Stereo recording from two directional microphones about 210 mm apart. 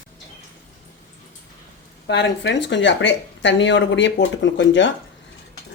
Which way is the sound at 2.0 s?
55° left (ahead or behind).